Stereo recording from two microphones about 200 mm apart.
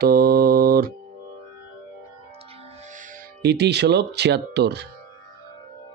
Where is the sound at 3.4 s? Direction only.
55° right (ahead or behind).